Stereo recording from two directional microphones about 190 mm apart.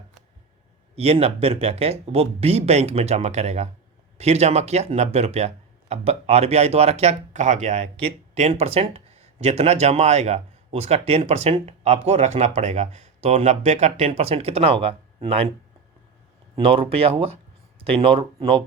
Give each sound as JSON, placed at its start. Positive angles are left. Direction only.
{"t": 0.9, "sound": "speech", "side_deg": -30}
{"t": 16.6, "sound": "speech", "side_deg": -30}